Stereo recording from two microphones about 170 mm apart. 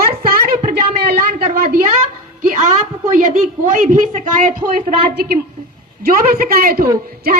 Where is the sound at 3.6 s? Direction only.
50° right (ahead or behind).